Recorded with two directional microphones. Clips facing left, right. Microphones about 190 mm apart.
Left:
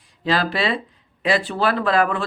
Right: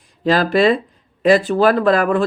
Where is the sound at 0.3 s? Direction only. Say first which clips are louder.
Right 7 dB; 45° right (ahead or behind).